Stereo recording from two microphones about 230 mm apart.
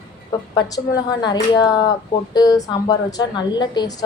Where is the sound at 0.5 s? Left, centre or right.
Centre.